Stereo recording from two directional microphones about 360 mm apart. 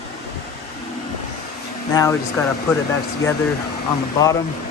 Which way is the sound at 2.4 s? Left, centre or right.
Centre.